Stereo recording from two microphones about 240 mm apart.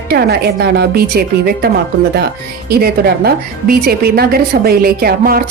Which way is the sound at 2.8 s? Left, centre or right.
Right.